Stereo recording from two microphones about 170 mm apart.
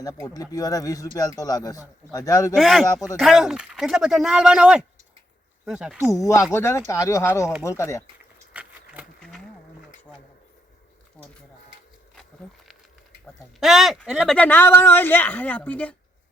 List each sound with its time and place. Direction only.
0.0 s speech: 20° left (ahead or behind)
2.6 s speech: centre (ahead or behind)
6.1 s speech: 20° left (ahead or behind)
8.5 s patter: 10° right (ahead or behind)
9.2 s a sound: 5° left (ahead or behind)
11.2 s speech: 5° left (ahead or behind)
13.6 s speech: centre (ahead or behind)